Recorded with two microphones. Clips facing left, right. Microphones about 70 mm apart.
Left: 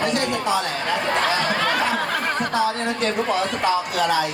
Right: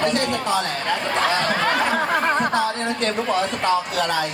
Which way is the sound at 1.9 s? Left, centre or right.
Right.